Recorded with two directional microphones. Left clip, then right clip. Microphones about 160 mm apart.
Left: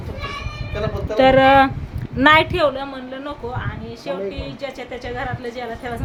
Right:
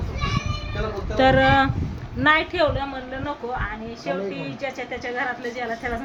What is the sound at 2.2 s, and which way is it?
Speech, 90° left.